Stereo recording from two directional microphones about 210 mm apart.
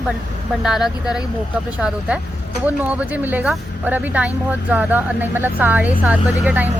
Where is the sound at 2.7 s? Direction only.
5° right (ahead or behind).